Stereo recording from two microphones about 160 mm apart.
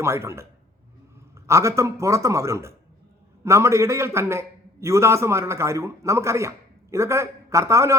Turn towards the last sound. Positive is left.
turn(degrees=-20)  # may be behind; listen again after turning